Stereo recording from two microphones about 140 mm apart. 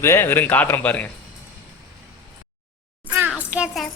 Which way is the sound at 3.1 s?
15° right (ahead or behind).